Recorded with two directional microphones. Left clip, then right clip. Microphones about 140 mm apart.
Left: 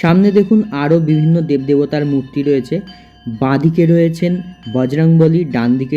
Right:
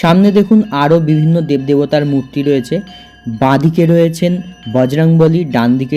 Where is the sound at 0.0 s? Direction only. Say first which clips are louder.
Right 2 dB; 35° right (ahead or behind).